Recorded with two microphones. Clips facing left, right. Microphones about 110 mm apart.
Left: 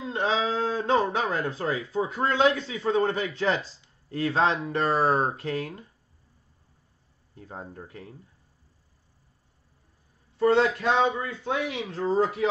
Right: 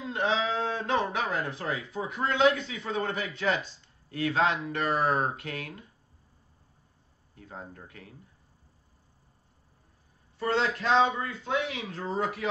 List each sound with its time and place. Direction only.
0.0 s speech: 30° left (ahead or behind)
7.3 s speech: 30° left (ahead or behind)
10.4 s speech: 20° left (ahead or behind)
11.2 s speech: 30° left (ahead or behind)